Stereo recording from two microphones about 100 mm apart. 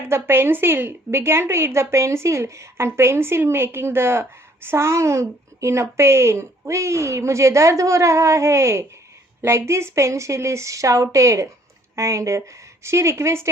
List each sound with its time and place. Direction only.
0.1 s a woman's voice: 25° right (ahead or behind)